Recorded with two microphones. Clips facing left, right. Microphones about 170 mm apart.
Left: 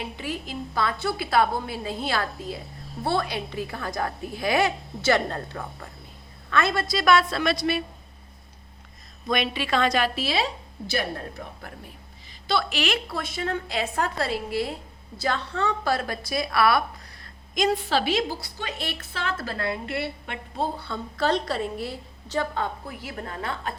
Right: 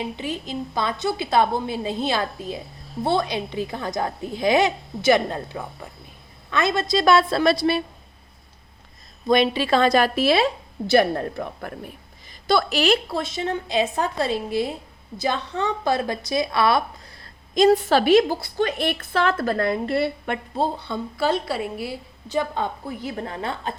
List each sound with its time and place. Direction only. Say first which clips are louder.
0.0 s a woman's voice: right 4 dB; 20° right (ahead or behind)
9.2 s a woman's voice: right 7 dB; 30° right (ahead or behind)
10.2 s a woman's voice: right 8 dB; 55° right (ahead or behind)
12.5 s a woman's voice: right 6 dB; 40° right (ahead or behind)
17.8 s a woman's voice: right 8 dB; 50° right (ahead or behind)
20.8 s a woman's voice: right 2 dB; 15° right (ahead or behind)